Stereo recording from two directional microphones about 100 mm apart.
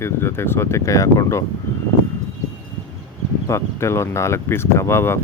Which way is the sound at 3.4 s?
30° left (ahead or behind).